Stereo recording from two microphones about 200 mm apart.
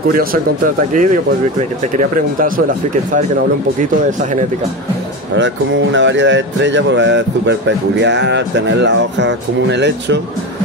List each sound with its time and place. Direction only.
0.1 s speech: 45° right (ahead or behind)
2.0 s speech: 45° right (ahead or behind)
5.3 s speech: 65° right (ahead or behind)